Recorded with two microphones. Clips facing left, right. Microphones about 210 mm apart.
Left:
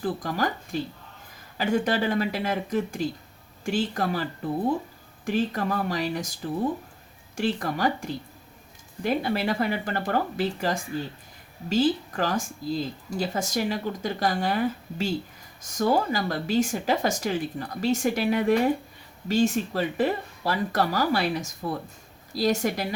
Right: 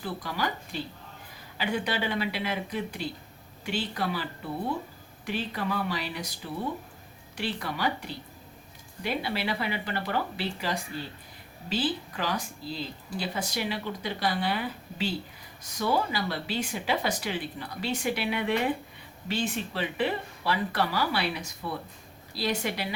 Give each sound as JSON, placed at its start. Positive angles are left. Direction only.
{"t": 0.0, "sound": "speech", "side_deg": 45}
{"t": 7.3, "sound": "speech", "side_deg": 45}